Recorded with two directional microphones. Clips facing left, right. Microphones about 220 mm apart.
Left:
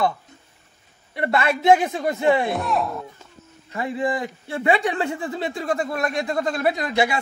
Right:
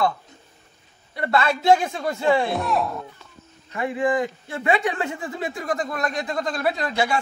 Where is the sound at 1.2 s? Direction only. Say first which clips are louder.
Left 1 dB; 20° left (ahead or behind).